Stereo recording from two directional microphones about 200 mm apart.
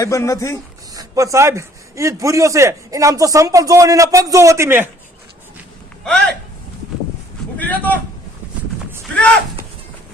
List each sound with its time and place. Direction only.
0.0 s a man's voice: 15° left (ahead or behind)
0.9 s a man's voice: 15° right (ahead or behind)
6.1 s speech: 5° left (ahead or behind)
7.6 s a man's voice: 10° left (ahead or behind)